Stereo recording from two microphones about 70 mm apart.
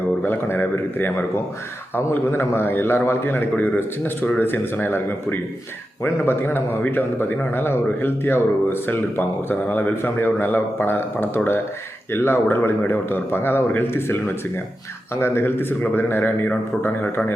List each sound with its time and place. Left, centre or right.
0.3 s a man's voice: left